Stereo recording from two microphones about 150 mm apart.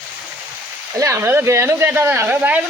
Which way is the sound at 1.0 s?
20° right (ahead or behind).